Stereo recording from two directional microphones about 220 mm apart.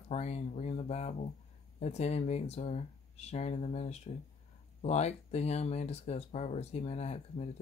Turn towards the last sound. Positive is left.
turn(degrees=30)  # may be behind; listen again after turning